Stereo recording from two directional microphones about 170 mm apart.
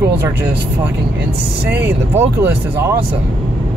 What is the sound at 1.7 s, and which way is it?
Speech, 10° right (ahead or behind).